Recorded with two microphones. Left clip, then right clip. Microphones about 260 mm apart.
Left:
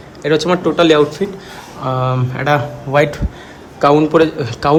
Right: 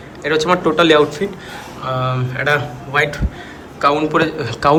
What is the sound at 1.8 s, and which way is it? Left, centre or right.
A man's voice, left.